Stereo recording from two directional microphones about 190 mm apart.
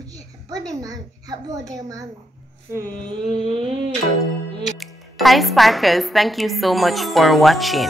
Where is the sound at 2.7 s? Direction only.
15° right (ahead or behind).